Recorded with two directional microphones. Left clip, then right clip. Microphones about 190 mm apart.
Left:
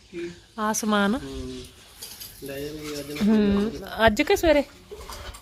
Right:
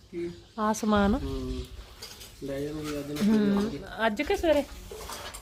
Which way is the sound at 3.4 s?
25° left (ahead or behind).